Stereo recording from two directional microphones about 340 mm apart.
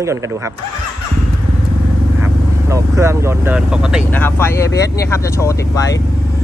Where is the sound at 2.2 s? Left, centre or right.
Centre.